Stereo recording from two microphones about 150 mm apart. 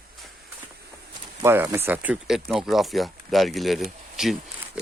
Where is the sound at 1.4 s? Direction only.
15° right (ahead or behind); by 4.3 s centre (ahead or behind).